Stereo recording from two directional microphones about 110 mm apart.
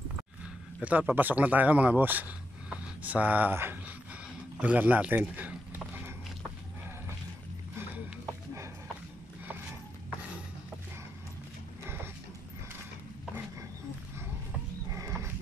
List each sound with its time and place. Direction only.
0.8 s a man's voice: 15° right (ahead or behind)
5.3 s horse: 15° right (ahead or behind)
11.8 s a sound: 20° right (ahead or behind)
15.0 s horse: 25° right (ahead or behind)